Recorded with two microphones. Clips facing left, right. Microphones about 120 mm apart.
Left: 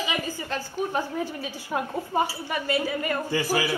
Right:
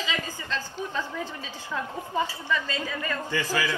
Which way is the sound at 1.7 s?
60° left (ahead or behind).